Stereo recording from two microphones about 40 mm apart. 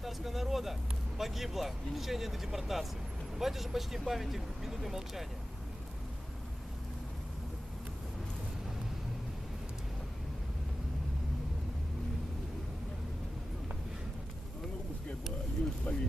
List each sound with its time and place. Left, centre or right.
0.0 s vehicle: centre
1.2 s speech: centre
15.9 s mechanisms: left